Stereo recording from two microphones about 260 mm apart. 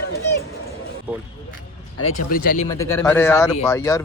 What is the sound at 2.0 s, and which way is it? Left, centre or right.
Speech, left.